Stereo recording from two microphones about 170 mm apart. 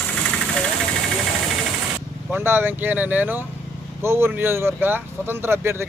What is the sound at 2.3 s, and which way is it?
Speech, 15° right (ahead or behind).